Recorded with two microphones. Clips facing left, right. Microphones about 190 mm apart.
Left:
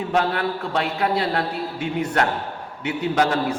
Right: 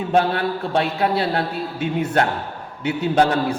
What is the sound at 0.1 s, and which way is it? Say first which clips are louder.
A man's voice: right 4 dB; 30° right (ahead or behind).